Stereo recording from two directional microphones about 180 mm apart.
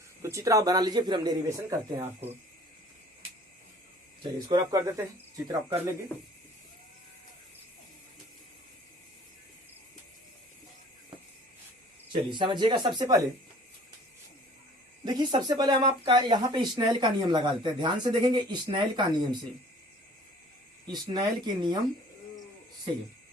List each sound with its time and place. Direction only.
0.2 s speech: 15° right (ahead or behind)
4.2 s speech: 25° right (ahead or behind)
12.1 s speech: 25° right (ahead or behind)
15.0 s speech: 25° right (ahead or behind)
20.8 s speech: 25° right (ahead or behind)